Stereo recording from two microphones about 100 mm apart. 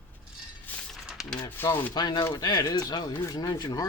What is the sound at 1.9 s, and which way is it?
Speech, 45° left (ahead or behind).